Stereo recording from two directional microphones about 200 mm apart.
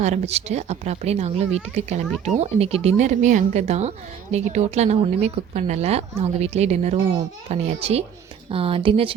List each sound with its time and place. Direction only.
0.0 s speech: 35° right (ahead or behind)